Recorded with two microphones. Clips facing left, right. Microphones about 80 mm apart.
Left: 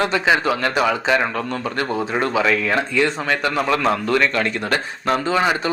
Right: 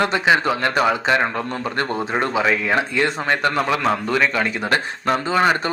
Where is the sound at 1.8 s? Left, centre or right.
Centre.